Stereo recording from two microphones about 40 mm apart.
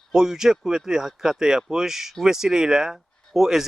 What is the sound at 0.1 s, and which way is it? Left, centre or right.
Speech, centre.